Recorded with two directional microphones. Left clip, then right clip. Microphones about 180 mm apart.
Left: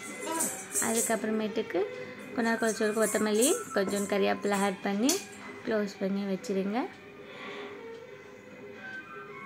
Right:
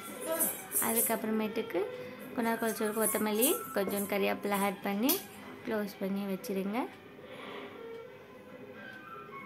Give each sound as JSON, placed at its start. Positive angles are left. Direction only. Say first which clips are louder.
{"t": 0.7, "sound": "a woman's voice", "louder": "left 3 dB", "side_deg": 15}